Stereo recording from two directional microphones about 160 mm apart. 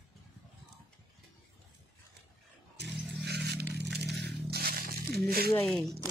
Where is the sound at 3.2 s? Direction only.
90° right.